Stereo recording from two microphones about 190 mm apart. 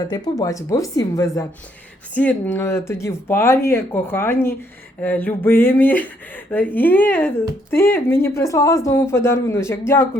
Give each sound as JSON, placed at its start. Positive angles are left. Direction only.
{"t": 0.3, "sound": "speech", "side_deg": 15}